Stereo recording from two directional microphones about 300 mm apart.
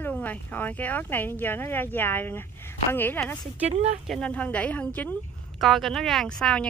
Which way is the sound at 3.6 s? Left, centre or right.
Right.